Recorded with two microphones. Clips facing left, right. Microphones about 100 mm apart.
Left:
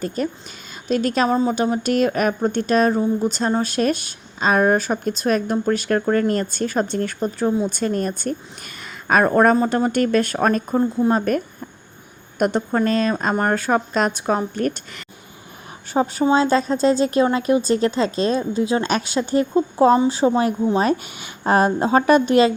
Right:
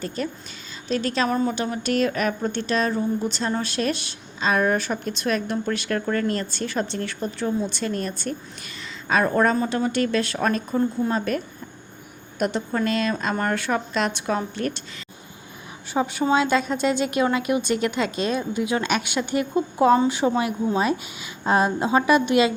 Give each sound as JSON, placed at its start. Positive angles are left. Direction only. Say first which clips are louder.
{"t": 0.2, "sound": "a woman's voice", "louder": "left 4 dB", "side_deg": 40}
{"t": 1.3, "sound": "a woman's voice", "louder": "left 5 dB", "side_deg": 25}
{"t": 15.9, "sound": "a woman's voice", "louder": "left 4 dB", "side_deg": 40}
{"t": 21.2, "sound": "a woman's voice", "louder": "left 3 dB", "side_deg": 60}